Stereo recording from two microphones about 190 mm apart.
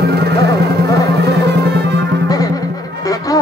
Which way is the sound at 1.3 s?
60° right (ahead or behind).